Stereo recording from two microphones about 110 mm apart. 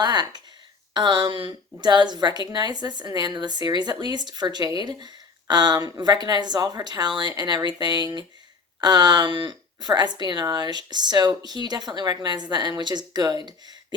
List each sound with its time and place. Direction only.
0.0 s a woman's voice: 40° right (ahead or behind)